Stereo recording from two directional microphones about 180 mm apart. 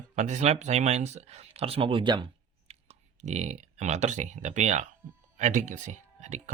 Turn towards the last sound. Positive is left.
turn(degrees=-40)  # may be behind; listen again after turning